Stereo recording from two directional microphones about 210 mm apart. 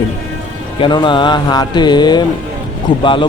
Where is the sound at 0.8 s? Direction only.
20° left (ahead or behind).